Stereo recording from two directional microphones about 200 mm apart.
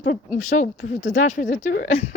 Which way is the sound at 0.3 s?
40° left (ahead or behind).